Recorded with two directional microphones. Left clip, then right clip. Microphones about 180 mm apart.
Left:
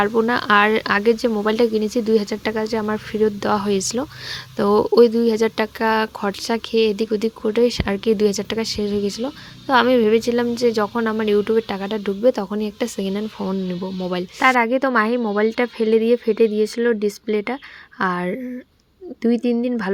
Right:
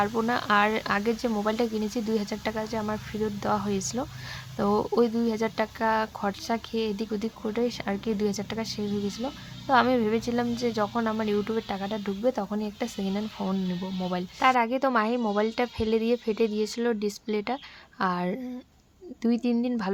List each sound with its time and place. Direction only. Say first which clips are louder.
0.0 s a woman's voice: left 8 dB; 25° left (ahead or behind)